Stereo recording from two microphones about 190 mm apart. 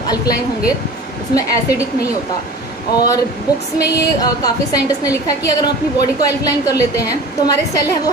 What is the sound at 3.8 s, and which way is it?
A woman's voice, 20° left (ahead or behind).